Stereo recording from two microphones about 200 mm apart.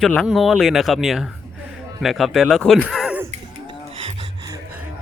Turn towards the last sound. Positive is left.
turn(degrees=-20)  # may be behind; listen again after turning